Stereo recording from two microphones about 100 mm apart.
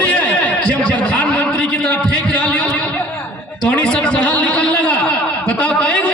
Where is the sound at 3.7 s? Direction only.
10° left (ahead or behind).